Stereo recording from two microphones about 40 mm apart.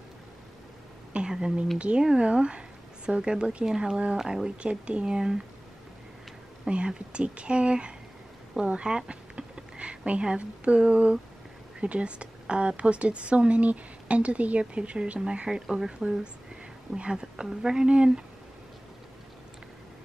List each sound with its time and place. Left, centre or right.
1.1 s speech: centre
1.8 s a woman's voice: right; by 4.5 s centre
4.5 s a woman's voice: right
6.7 s a woman's voice: right